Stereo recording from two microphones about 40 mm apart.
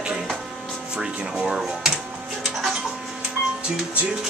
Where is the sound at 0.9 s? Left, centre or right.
Centre.